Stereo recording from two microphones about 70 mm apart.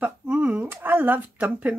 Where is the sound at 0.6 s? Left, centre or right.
Right.